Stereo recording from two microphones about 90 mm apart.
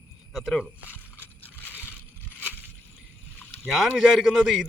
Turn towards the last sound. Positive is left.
turn(degrees=-5)  # may be behind; listen again after turning